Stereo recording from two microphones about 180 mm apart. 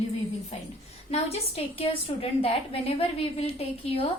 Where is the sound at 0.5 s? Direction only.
35° left (ahead or behind).